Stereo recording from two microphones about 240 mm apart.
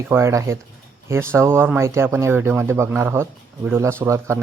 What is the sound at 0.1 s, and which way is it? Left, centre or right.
Speech, centre.